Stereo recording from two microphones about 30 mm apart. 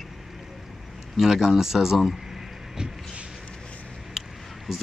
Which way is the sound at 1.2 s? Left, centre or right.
Centre.